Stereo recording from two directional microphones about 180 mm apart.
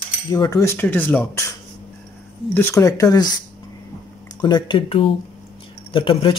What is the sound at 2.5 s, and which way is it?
Speech, 15° left (ahead or behind).